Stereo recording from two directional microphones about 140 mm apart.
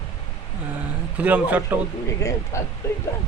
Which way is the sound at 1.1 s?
10° right (ahead or behind).